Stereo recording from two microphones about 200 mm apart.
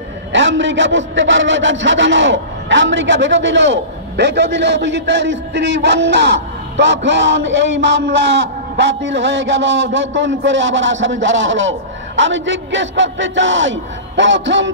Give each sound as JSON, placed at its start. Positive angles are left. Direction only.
{"t": 0.3, "sound": "a man's voice", "side_deg": -65}